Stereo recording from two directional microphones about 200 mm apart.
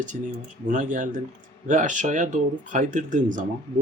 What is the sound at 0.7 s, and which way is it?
Speech, 40° right (ahead or behind).